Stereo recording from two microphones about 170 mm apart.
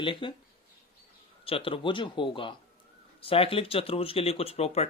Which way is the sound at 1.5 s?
30° left (ahead or behind).